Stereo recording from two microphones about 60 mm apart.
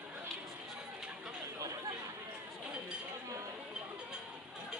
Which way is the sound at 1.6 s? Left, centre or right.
Right.